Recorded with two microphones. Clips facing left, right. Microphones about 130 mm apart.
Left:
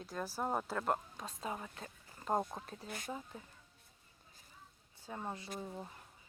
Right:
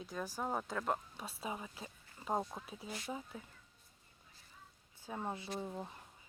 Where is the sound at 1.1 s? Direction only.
5° right (ahead or behind).